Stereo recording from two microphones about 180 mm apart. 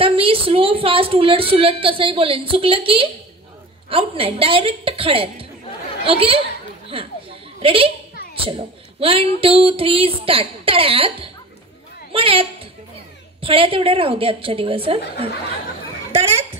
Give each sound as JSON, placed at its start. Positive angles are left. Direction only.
{"t": 0.0, "sound": "a woman's voice", "side_deg": -30}